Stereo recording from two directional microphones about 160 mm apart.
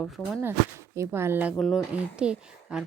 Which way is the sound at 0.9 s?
15° right (ahead or behind).